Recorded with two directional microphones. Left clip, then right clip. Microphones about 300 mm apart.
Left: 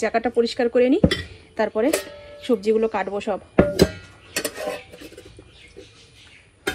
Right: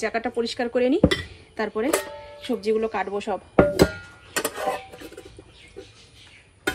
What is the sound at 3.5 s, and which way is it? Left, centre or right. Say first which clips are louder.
Music: right 1 dB; right.